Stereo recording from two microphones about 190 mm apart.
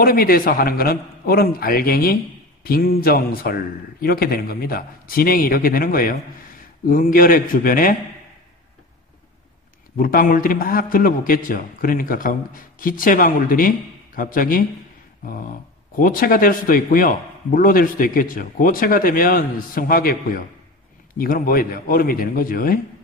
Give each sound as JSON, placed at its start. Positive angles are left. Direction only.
{"t": 0.0, "sound": "a man's voice", "side_deg": 50}
{"t": 9.9, "sound": "a man's voice", "side_deg": 50}